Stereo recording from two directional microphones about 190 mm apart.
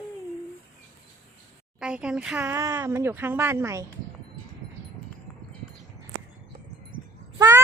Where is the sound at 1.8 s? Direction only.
5° right (ahead or behind).